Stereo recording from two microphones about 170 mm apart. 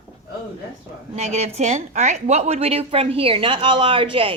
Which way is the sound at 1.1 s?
40° right (ahead or behind).